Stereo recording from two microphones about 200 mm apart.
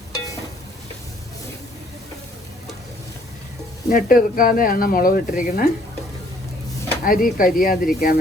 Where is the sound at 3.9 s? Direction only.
45° left (ahead or behind).